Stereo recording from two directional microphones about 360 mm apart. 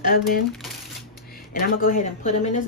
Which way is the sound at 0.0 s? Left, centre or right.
Left.